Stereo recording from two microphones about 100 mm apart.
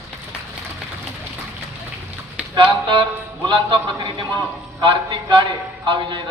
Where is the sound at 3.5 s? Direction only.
55° right (ahead or behind).